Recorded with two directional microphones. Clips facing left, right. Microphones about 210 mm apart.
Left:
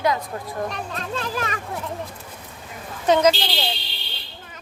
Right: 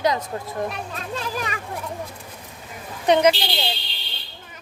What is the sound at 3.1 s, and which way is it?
Speech, 15° right (ahead or behind).